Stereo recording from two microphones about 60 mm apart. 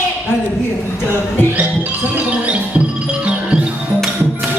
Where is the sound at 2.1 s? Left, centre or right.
Right.